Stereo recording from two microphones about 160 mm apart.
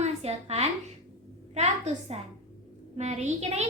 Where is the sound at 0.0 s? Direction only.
40° right (ahead or behind).